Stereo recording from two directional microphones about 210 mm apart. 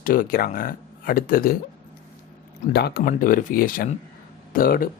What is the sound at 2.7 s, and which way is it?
Speech, 50° left (ahead or behind).